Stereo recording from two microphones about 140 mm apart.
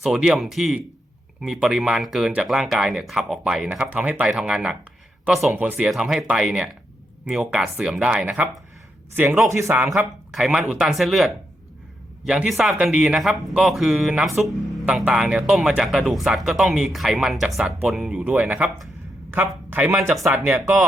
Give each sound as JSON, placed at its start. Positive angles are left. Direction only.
{"t": 0.0, "sound": "speech", "side_deg": -5}
{"t": 9.5, "sound": "speech", "side_deg": -20}
{"t": 10.3, "sound": "speech", "side_deg": 0}